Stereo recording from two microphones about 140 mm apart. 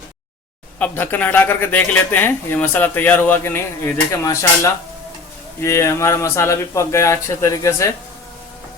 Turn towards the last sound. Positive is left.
turn(degrees=20)  # may be behind; listen again after turning